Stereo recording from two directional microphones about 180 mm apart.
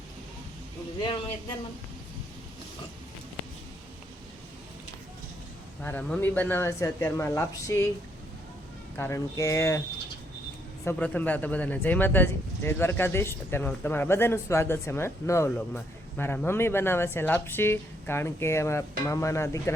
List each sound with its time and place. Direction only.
5.8 s speech: 10° left (ahead or behind)
9.0 s speech: 15° left (ahead or behind)
10.8 s speech: 10° left (ahead or behind)